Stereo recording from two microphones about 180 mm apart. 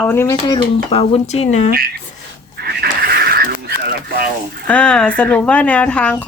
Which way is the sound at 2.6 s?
60° right (ahead or behind).